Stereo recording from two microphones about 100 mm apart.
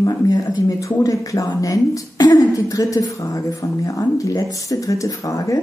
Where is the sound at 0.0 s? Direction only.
35° left (ahead or behind).